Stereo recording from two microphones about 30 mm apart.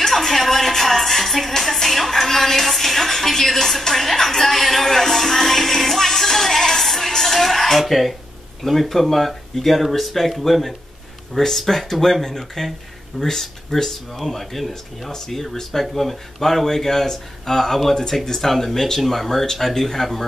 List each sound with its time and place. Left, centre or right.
0.0 s music: centre
1.6 s a woman's voice: centre
6.0 s music: centre
7.7 s a woman's voice: centre
14.1 s speech: centre
14.7 s a woman's voice: centre